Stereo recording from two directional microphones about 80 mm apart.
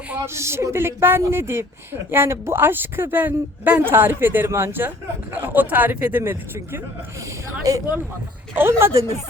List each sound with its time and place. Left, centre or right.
0.3 s speech: right
7.7 s speech: right
8.5 s speech: right